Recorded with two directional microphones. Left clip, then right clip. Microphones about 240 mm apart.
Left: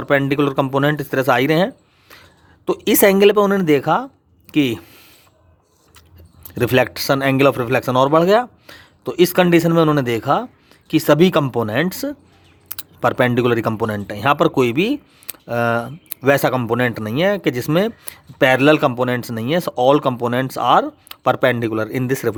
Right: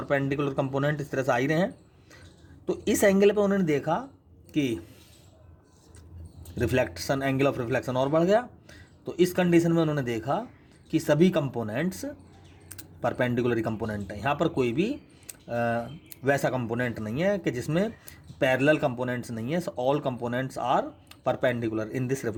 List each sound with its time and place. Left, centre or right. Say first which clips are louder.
0.0 s speech: left 10 dB; left
6.5 s speech: left 10 dB; left